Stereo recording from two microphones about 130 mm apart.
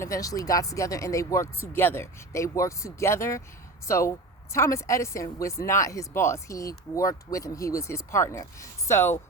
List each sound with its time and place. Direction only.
0.0 s a woman's voice: 25° left (ahead or behind)